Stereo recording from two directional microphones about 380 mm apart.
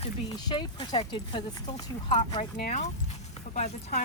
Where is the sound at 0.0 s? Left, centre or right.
Centre.